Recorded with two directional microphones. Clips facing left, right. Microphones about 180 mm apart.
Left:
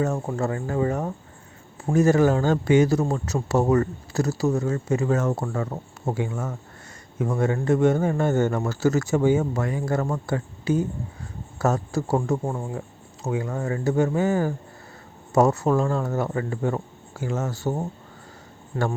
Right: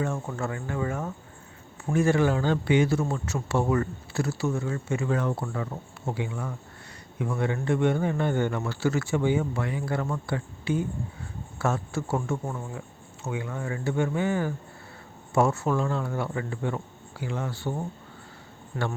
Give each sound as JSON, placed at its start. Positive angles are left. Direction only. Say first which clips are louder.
{"t": 0.0, "sound": "a man's voice", "louder": "left 5 dB", "side_deg": 40}
{"t": 18.7, "sound": "speech", "louder": "left 5 dB", "side_deg": 25}